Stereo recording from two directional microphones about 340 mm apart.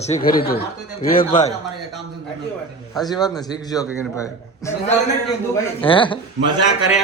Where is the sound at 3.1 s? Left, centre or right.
Centre.